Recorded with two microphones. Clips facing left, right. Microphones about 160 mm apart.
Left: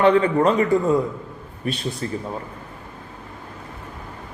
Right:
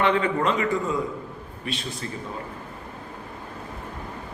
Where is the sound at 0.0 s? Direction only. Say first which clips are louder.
Left 6 dB; 35° left (ahead or behind).